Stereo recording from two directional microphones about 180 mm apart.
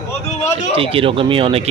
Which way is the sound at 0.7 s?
30° right (ahead or behind).